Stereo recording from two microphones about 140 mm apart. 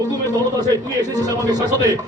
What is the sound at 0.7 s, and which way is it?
Speech, 25° right (ahead or behind).